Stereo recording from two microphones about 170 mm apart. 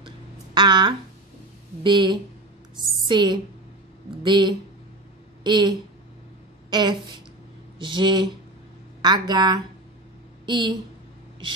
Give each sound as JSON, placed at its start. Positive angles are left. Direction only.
{"t": 0.6, "sound": "a woman's voice", "side_deg": -25}